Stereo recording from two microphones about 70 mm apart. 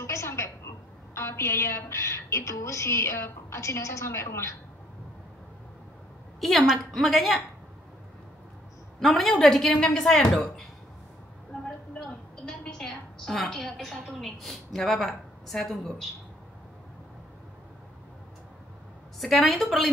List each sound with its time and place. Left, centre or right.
0.0 s a sound: left
1.1 s a woman's voice: left
6.4 s a woman's voice: centre
9.0 s a woman's voice: centre
12.0 s a woman's voice: centre
19.1 s a woman's voice: centre